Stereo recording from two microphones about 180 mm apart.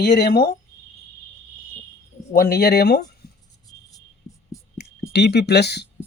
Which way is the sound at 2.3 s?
55° left (ahead or behind).